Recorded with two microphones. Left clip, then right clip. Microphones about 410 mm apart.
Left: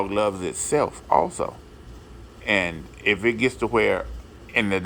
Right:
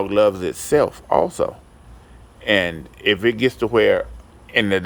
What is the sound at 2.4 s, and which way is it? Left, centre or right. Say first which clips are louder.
Speech: right 4 dB; right.